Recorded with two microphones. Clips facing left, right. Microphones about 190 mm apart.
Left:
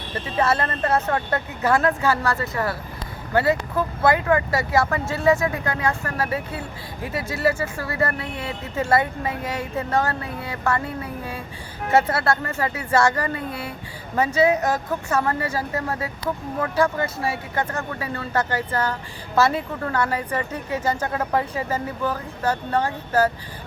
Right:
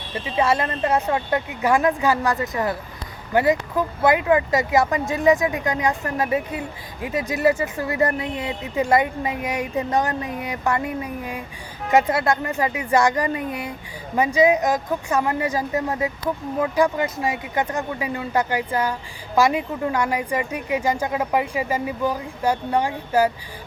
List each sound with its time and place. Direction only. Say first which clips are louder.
0.1 s speech: right 1 dB; 15° right (ahead or behind)